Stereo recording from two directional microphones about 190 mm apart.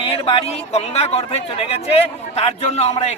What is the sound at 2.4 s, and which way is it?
Speech, 30° left (ahead or behind).